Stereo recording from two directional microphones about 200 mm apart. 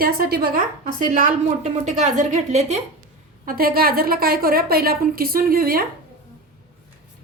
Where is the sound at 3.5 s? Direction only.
45° right (ahead or behind).